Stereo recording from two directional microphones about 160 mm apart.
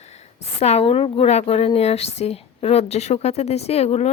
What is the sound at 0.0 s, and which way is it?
A woman's voice, 45° left (ahead or behind).